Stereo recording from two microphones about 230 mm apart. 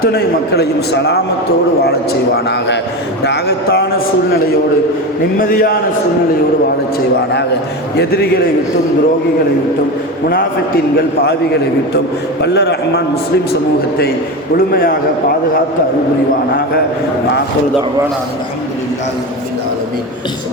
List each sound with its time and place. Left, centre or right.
0.0 s a man's voice: left
5.4 s a man's voice: left
7.9 s a man's voice: left
12.4 s a man's voice: left
14.7 s a man's voice: left